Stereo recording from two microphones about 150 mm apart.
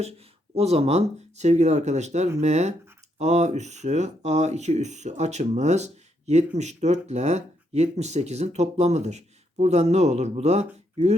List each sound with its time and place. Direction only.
0.5 s speech: 45° right (ahead or behind)